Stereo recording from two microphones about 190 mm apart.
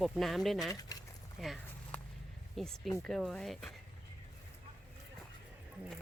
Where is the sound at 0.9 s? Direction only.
20° left (ahead or behind).